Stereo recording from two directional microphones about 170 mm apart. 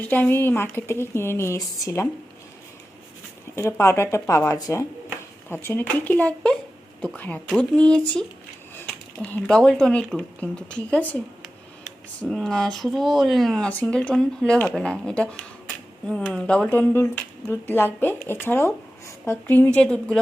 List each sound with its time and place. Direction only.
0.0 s speech: 10° left (ahead or behind)
3.5 s speech: 15° left (ahead or behind)
9.2 s speech: 5° left (ahead or behind)
12.2 s speech: 5° left (ahead or behind)